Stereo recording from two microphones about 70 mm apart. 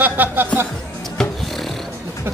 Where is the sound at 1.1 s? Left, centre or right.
Centre.